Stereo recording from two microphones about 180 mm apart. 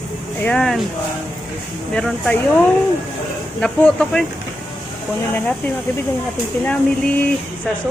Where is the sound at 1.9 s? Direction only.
5° left (ahead or behind).